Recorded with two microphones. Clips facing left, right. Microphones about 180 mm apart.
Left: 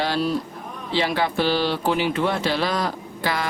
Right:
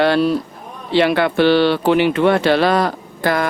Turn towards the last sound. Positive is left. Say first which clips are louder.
# right 7 dB
turn(degrees=-55)  # may be behind; listen again after turning